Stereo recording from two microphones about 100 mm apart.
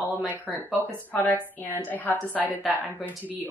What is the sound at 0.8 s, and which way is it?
A woman's voice, 20° left (ahead or behind).